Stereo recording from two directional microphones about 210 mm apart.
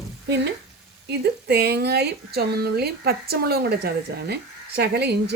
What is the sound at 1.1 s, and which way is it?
A woman's voice, 50° right (ahead or behind).